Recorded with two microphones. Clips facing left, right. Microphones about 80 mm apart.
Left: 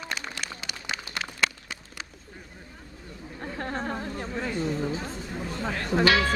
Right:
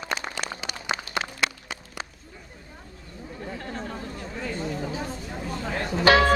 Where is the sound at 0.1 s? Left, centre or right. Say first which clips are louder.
Right 6 dB; right.